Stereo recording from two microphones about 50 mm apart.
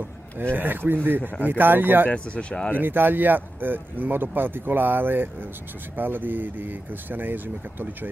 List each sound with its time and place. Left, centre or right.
0.4 s speech: right
2.0 s speech: left
2.8 s speech: right